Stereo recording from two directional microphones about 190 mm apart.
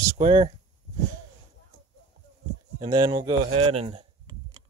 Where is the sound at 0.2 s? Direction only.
25° right (ahead or behind).